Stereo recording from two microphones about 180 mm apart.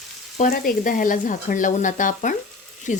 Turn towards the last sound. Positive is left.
turn(degrees=45)  # may be behind; listen again after turning